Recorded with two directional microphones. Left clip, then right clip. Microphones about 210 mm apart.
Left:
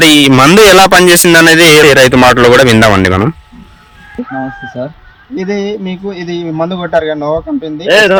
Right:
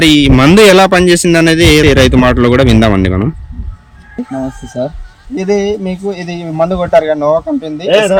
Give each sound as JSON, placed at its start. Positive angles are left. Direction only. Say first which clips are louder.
{"t": 0.0, "sound": "a man's voice", "louder": "left 3 dB", "side_deg": -5}
{"t": 5.3, "sound": "a man's voice", "louder": "right 3 dB", "side_deg": -20}